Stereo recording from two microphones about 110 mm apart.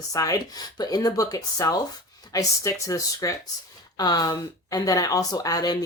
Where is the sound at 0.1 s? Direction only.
30° left (ahead or behind).